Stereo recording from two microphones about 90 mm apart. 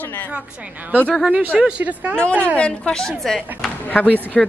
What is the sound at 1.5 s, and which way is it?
A woman's voice, 10° right (ahead or behind).